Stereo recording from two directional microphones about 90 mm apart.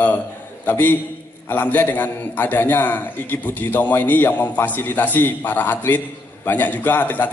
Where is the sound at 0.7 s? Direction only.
20° left (ahead or behind).